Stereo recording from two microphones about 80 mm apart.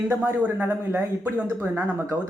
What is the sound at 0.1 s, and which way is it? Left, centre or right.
Speech, right.